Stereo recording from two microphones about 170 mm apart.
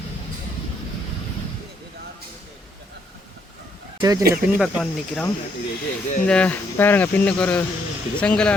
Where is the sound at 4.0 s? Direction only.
20° right (ahead or behind).